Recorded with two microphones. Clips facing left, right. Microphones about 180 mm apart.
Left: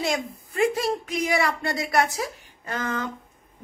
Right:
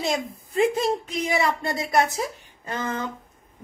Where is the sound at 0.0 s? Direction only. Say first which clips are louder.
Even; 20° right (ahead or behind).